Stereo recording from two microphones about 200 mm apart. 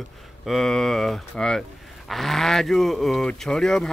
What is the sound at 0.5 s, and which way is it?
Speech, centre (ahead or behind).